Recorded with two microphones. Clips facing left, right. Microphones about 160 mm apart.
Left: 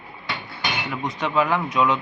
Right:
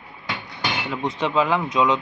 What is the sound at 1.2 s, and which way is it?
Speech, 20° right (ahead or behind).